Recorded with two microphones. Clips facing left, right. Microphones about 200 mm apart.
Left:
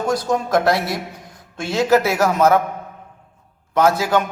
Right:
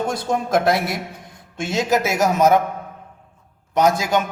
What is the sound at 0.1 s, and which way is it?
A man's voice, 25° right (ahead or behind).